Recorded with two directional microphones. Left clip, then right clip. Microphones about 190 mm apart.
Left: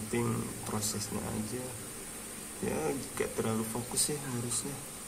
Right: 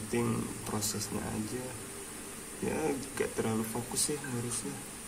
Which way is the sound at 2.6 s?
Centre (ahead or behind).